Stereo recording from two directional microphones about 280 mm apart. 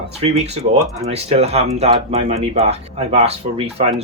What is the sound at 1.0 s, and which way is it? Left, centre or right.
Speech, right.